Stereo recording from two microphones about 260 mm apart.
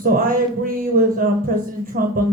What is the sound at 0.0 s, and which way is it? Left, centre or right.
Speech, right.